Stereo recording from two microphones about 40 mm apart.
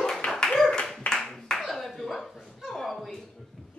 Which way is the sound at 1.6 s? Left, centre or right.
Centre.